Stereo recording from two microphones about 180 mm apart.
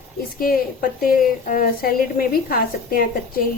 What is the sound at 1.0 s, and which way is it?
A woman's voice, 50° left (ahead or behind).